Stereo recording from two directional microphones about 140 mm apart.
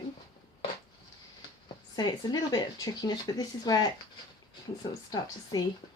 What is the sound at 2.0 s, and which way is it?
Speech, 30° left (ahead or behind).